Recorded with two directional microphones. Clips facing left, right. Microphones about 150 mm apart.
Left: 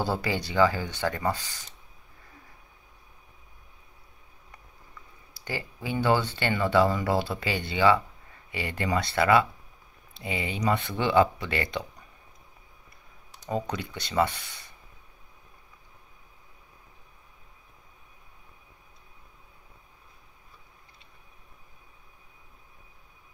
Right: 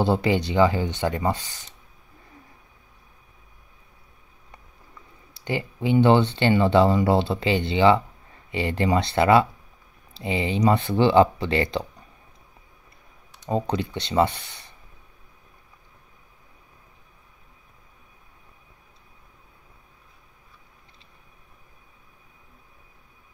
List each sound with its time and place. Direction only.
0.0 s speech: 20° right (ahead or behind)
5.3 s speech: 20° right (ahead or behind)
13.5 s speech: 30° right (ahead or behind)